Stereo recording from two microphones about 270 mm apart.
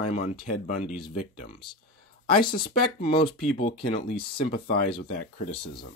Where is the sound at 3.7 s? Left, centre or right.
Centre.